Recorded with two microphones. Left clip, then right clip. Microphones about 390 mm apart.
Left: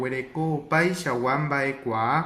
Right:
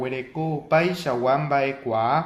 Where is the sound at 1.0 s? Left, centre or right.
Centre.